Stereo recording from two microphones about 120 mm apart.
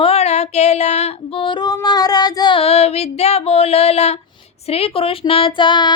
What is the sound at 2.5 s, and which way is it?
Female singing, 60° left (ahead or behind).